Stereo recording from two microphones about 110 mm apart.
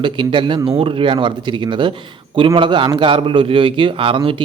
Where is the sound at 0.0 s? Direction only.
50° right (ahead or behind).